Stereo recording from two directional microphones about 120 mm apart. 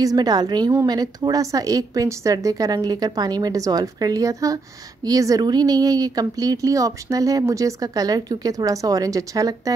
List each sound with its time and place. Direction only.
0.0 s a woman's voice: 30° right (ahead or behind)